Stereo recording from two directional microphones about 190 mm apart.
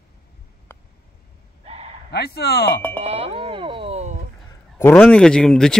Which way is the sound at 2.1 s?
55° left (ahead or behind).